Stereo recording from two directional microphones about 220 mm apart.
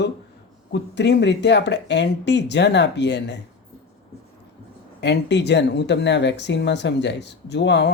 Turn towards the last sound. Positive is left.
turn(degrees=50)  # may be behind; listen again after turning